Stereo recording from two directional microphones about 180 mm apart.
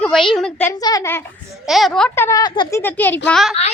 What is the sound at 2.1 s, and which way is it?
Speech, 15° left (ahead or behind).